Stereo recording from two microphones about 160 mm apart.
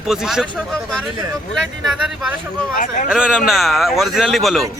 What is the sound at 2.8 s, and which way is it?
Speech, 50° left (ahead or behind).